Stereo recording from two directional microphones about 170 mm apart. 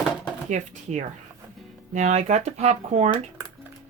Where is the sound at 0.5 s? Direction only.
45° right (ahead or behind).